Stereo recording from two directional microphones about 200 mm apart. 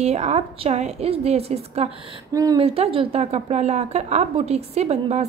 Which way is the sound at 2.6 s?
30° right (ahead or behind).